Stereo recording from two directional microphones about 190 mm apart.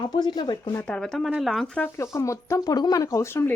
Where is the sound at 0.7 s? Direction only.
5° left (ahead or behind).